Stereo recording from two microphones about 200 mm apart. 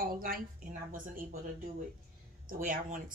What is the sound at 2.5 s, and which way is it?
Speech, 45° right (ahead or behind).